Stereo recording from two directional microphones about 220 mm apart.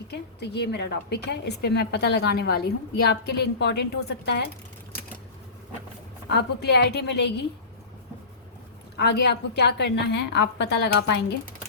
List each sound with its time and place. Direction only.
0.1 s a woman's voice: 50° left (ahead or behind)
6.2 s a woman's voice: 50° left (ahead or behind)
9.0 s a woman's voice: 50° left (ahead or behind)